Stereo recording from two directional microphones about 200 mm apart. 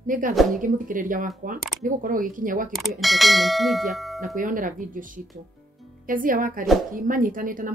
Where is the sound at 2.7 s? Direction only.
Centre (ahead or behind).